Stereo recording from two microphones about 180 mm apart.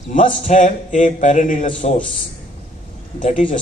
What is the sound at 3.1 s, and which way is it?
Speech, 45° left (ahead or behind).